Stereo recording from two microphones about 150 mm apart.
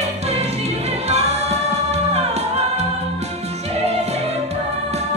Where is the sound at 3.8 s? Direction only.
45° right (ahead or behind).